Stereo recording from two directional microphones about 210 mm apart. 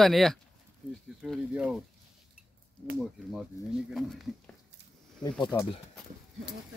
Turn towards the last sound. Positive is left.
turn(degrees=20)  # may be behind; listen again after turning